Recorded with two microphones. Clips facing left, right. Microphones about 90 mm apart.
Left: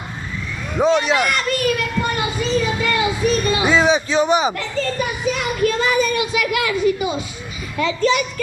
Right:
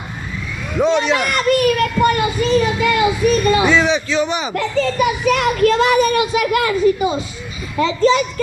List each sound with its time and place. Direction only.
0.8 s speech: 5° left (ahead or behind)
1.4 s a child's voice: 50° right (ahead or behind)
3.6 s speech: 10° left (ahead or behind)
4.1 s a man's voice: 25° left (ahead or behind)
4.5 s a child's voice: 75° right (ahead or behind); by 8.2 s 30° right (ahead or behind)